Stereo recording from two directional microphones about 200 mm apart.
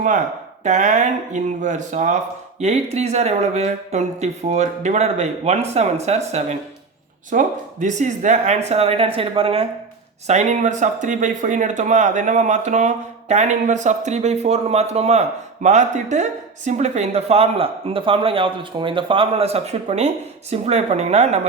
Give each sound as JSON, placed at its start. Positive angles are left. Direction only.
{"t": 0.6, "sound": "speech", "side_deg": -35}